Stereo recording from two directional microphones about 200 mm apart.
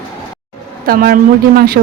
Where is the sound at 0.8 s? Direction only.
45° right (ahead or behind).